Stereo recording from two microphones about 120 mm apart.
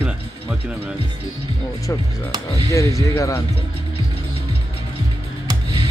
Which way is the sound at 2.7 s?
25° left (ahead or behind).